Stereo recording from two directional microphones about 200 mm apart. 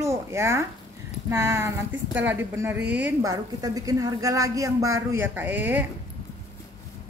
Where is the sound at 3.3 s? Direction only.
20° right (ahead or behind).